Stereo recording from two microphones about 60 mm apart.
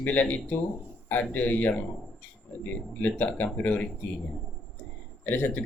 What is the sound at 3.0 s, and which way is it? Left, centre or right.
Speech, left.